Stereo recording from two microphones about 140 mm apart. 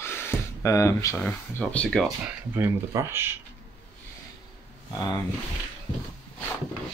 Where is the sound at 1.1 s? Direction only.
10° left (ahead or behind).